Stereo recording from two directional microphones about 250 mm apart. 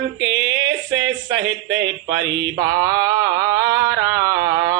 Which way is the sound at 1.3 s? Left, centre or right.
Right.